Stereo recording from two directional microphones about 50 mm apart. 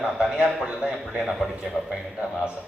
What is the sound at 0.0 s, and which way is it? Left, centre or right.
Speech, right.